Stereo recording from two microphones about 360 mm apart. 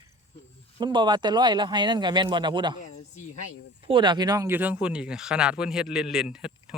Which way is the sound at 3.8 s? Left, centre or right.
Centre.